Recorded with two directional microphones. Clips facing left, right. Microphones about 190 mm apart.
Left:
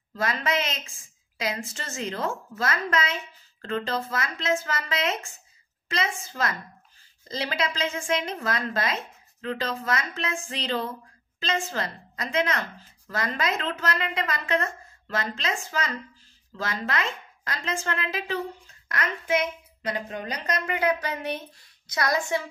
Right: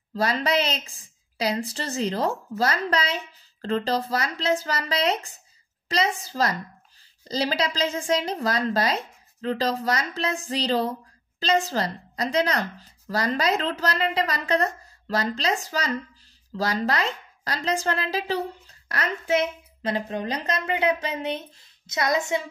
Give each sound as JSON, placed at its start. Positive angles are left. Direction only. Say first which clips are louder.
{"t": 0.1, "sound": "speech", "louder": "right 4 dB", "side_deg": -35}